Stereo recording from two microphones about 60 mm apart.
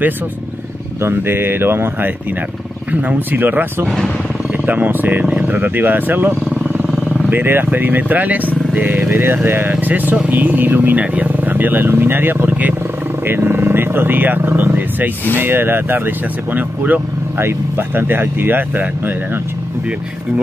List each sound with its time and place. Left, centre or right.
1.0 s speech: right
3.8 s speech: centre
4.6 s speech: right
17.4 s speech: right